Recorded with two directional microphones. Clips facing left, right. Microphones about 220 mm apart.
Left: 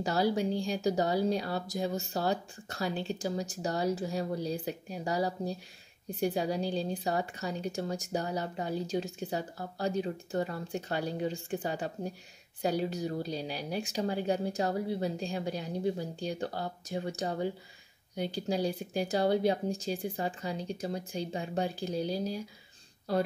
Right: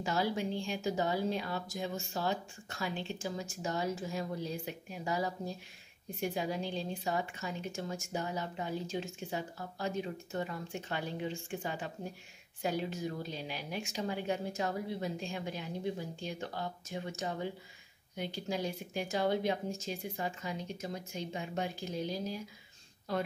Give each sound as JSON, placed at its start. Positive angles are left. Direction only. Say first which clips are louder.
{"t": 0.0, "sound": "a woman's voice", "louder": "left 5 dB", "side_deg": 35}